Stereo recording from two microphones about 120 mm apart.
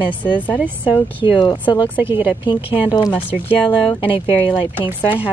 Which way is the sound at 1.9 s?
15° right (ahead or behind).